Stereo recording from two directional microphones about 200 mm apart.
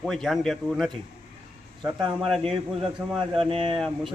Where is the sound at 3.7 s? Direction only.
Centre (ahead or behind).